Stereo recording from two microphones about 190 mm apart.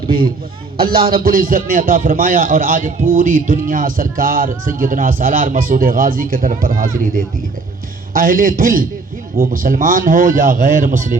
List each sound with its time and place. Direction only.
0.9 s speech: 50° right (ahead or behind)